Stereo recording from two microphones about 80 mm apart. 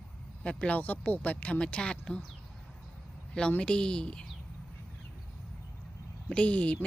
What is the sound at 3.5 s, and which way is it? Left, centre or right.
Speech, centre.